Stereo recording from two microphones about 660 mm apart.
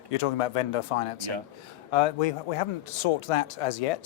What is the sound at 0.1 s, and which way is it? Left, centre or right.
Speech, left.